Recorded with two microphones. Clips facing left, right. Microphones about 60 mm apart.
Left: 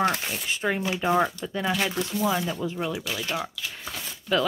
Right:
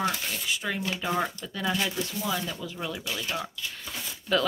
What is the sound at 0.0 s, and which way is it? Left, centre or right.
Speech, left.